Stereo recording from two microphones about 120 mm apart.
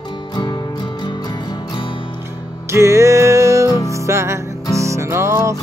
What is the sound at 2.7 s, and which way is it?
Music, 25° right (ahead or behind).